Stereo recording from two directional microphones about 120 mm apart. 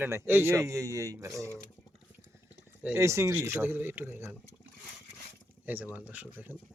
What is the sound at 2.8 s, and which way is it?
Speech, 20° right (ahead or behind).